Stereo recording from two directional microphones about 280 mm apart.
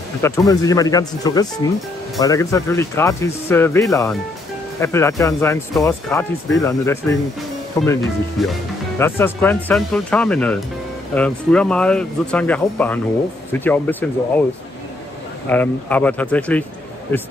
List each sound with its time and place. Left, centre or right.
0.2 s speech: centre
15.5 s speech: centre